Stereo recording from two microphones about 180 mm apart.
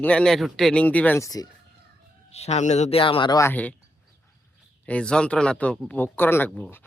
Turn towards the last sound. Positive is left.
turn(degrees=10)  # may be behind; listen again after turning